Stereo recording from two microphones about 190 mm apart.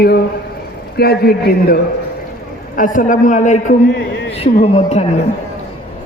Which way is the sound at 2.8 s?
40° left (ahead or behind).